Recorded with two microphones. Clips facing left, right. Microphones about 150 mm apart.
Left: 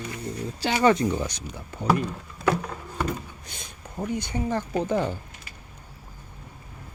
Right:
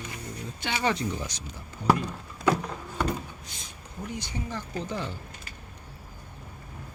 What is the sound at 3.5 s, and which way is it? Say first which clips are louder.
Speech: left 3 dB; 55° left (ahead or behind).